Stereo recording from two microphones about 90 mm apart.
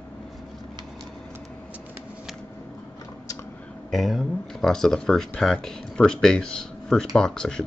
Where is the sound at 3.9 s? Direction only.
Centre (ahead or behind).